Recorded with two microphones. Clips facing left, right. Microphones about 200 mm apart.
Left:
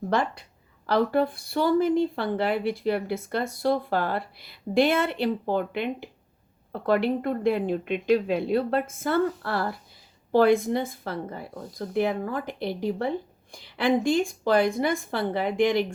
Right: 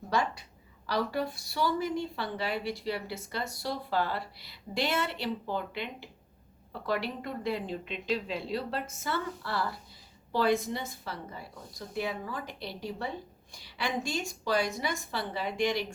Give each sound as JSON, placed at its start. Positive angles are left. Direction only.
{"t": 0.1, "sound": "a woman's voice", "side_deg": 55}